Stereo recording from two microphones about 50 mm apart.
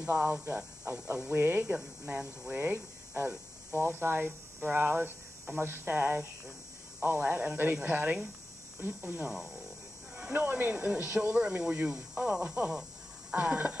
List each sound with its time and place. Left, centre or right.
0.0 s speech: right
1.3 s speech: right
2.0 s speech: right
10.1 s speech: right